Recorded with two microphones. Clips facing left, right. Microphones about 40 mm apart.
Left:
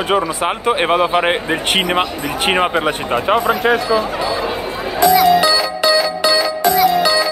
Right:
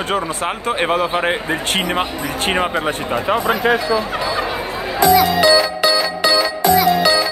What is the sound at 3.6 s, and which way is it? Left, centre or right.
Speech, left.